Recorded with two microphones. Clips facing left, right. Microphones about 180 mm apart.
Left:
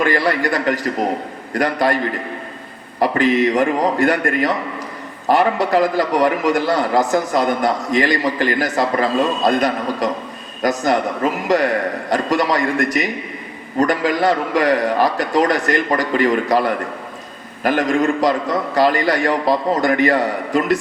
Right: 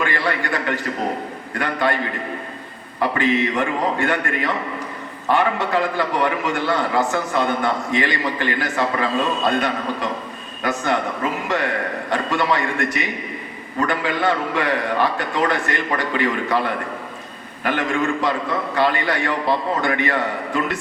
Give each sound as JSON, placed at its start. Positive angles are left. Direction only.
{"t": 0.0, "sound": "a man's voice", "side_deg": 40}
{"t": 3.0, "sound": "a man's voice", "side_deg": 40}